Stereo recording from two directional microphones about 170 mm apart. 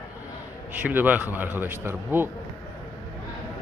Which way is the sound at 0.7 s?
10° right (ahead or behind).